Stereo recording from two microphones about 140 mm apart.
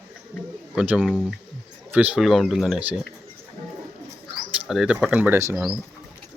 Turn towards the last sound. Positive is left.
turn(degrees=-20)  # may be behind; listen again after turning